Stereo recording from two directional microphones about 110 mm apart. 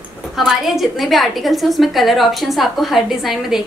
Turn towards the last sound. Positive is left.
turn(degrees=-5)  # may be behind; listen again after turning